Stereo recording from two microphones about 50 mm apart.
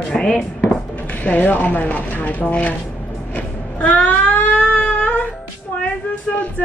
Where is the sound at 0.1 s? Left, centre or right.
Centre.